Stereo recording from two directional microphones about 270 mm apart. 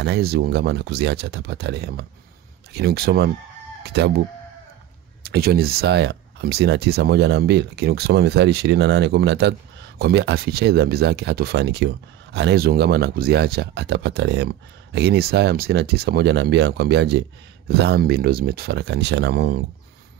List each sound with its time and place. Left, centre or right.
0.0 s speech: right
5.2 s speech: right